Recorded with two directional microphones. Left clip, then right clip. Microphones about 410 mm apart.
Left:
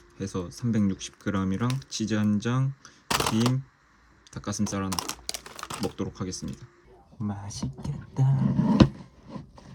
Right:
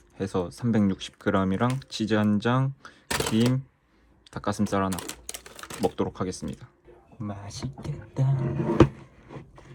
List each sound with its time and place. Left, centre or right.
0.2 s speech: centre
4.9 s speech: centre
5.3 s typing: centre
5.6 s speech: centre